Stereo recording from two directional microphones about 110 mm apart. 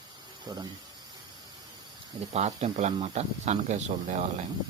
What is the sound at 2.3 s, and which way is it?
Speech, 80° right.